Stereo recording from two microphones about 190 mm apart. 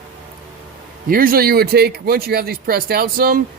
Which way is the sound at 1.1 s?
50° right (ahead or behind).